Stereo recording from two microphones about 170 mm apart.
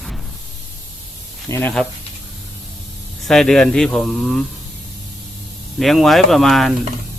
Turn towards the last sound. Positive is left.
turn(degrees=0)  # may be behind; listen again after turning